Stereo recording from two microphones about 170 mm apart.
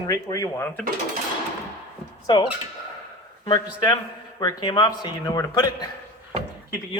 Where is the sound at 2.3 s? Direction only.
30° left (ahead or behind).